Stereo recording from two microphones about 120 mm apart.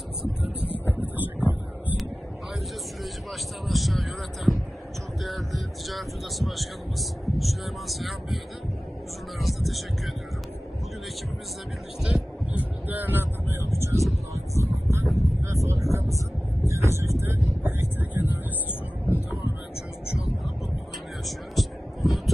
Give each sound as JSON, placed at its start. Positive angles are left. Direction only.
{"t": 0.8, "sound": "a sound", "side_deg": -15}
{"t": 3.6, "sound": "a sound", "side_deg": 0}
{"t": 5.2, "sound": "speech", "side_deg": 0}
{"t": 9.4, "sound": "speech", "side_deg": 0}
{"t": 12.0, "sound": "speech", "side_deg": -10}
{"t": 21.3, "sound": "heart sounds", "side_deg": 0}